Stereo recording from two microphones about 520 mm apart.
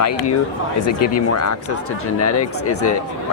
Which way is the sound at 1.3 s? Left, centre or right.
Left.